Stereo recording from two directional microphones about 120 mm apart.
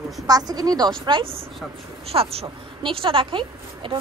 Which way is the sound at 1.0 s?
45° right (ahead or behind).